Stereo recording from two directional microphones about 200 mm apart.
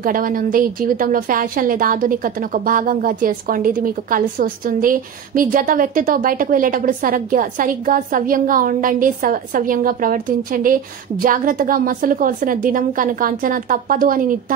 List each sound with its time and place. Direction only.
0.0 s a woman's voice: 45° right (ahead or behind)